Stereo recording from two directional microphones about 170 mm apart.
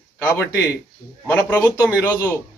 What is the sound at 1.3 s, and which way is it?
Speech, 15° left (ahead or behind).